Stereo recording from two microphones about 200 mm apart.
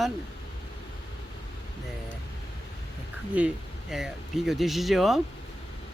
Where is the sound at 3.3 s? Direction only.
5° right (ahead or behind).